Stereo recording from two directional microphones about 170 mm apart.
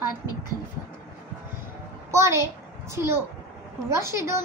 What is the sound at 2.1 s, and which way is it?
Speech, 15° right (ahead or behind).